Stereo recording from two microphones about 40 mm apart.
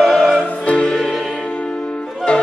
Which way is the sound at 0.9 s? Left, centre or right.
Centre.